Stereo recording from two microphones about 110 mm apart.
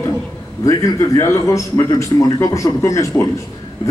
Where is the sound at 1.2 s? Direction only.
25° left (ahead or behind).